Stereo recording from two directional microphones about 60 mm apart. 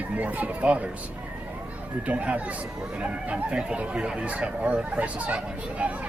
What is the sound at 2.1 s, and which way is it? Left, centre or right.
Speech, right.